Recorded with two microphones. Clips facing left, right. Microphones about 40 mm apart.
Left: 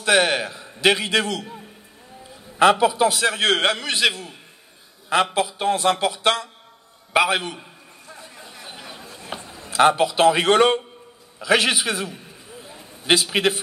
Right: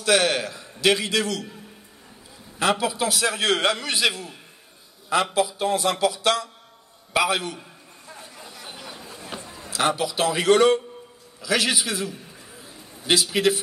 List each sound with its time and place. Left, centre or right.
0.0 s a man's voice: left
2.6 s a man's voice: left
8.6 s chatter: left
9.1 s a sound: left
9.7 s a man's voice: left
12.6 s a sound: left